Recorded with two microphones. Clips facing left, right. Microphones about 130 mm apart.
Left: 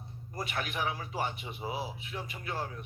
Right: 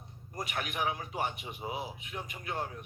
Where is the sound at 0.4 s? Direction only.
35° left (ahead or behind).